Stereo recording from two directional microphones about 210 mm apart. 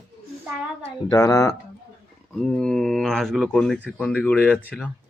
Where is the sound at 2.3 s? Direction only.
5° left (ahead or behind).